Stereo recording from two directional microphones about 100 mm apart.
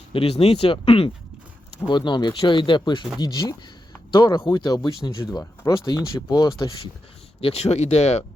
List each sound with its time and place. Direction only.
0.1 s speech: 75° left (ahead or behind)
1.9 s speech: 50° left (ahead or behind)
5.4 s speech: 30° left (ahead or behind)
6.1 s speech: 40° left (ahead or behind)
7.4 s speech: 90° left